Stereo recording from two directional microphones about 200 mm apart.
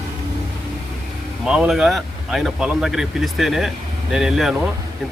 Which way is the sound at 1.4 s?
5° right (ahead or behind).